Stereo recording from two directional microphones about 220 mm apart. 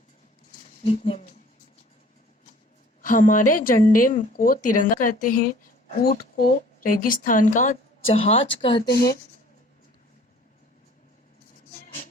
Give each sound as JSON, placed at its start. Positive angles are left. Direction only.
{"t": 0.9, "sound": "speech", "side_deg": 25}
{"t": 3.0, "sound": "speech", "side_deg": 35}
{"t": 8.9, "sound": "speech", "side_deg": 45}